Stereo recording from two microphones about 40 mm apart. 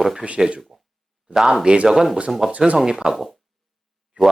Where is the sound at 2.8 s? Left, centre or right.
Centre.